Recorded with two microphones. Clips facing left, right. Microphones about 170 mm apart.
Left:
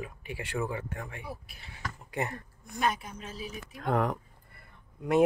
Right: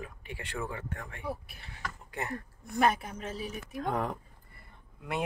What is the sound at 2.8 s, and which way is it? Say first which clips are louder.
Speech: right 3 dB; 60° right (ahead or behind).